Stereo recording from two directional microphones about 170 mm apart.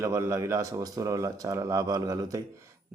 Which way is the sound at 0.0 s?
20° right (ahead or behind).